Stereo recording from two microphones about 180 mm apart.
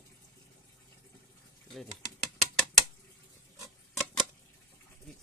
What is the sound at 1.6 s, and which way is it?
Typing, centre (ahead or behind).